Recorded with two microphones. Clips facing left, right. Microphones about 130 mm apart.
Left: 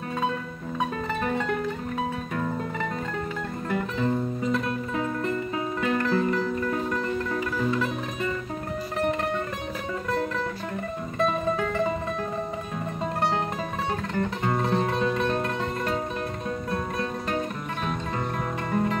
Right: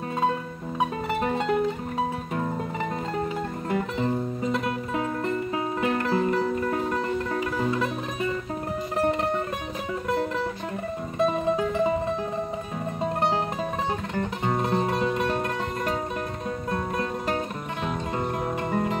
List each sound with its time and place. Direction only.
0.7 s music: 25° right (ahead or behind)
3.7 s music: 25° right (ahead or behind)
11.2 s music: 15° right (ahead or behind)
14.1 s music: 15° right (ahead or behind)
18.7 s music: 25° right (ahead or behind)